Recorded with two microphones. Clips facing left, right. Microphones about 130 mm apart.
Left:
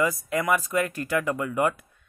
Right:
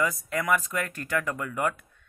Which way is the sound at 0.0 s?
5° left (ahead or behind).